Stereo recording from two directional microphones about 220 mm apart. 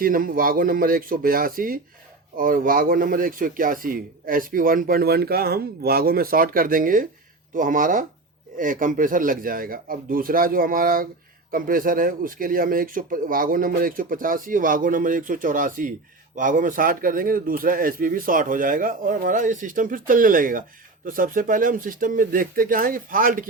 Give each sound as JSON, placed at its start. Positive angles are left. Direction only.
{"t": 0.0, "sound": "speech", "side_deg": -40}